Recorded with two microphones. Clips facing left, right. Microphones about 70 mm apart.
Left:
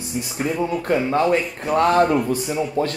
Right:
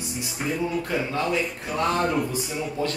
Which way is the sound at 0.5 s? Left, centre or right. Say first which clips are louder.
Left 5 dB; left.